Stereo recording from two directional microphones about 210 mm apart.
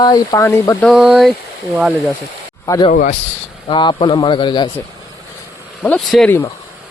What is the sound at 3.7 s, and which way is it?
A man's voice, 25° left (ahead or behind).